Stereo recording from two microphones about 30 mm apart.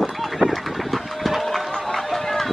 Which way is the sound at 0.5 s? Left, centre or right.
Centre.